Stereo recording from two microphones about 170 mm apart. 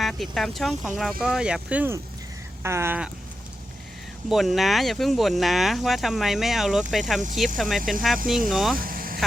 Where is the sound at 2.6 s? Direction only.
15° right (ahead or behind).